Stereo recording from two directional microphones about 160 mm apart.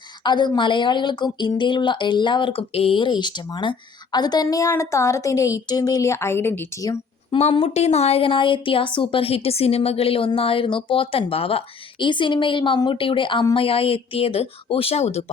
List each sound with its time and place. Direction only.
0.3 s a woman's voice: 30° left (ahead or behind)
7.3 s speech: 35° left (ahead or behind)